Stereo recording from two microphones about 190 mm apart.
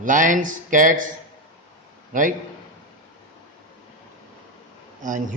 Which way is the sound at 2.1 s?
45° right (ahead or behind).